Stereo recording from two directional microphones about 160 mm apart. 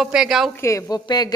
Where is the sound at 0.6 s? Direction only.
20° left (ahead or behind).